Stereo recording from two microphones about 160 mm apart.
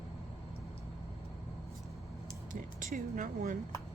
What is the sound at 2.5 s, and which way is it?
Speech, 55° right (ahead or behind).